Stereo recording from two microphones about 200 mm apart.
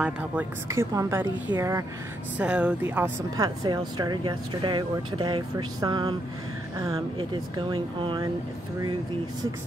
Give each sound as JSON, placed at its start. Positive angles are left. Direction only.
{"t": 0.0, "sound": "a woman's voice", "side_deg": -10}
{"t": 3.3, "sound": "speech", "side_deg": -20}